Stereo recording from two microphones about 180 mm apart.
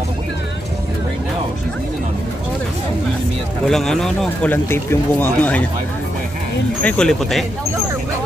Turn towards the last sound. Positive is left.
turn(degrees=0)  # may be behind; listen again after turning